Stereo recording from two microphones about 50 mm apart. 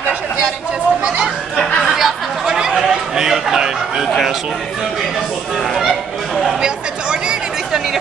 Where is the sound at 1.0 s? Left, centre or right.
Centre.